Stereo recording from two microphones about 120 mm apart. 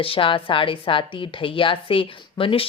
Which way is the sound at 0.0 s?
50° left (ahead or behind).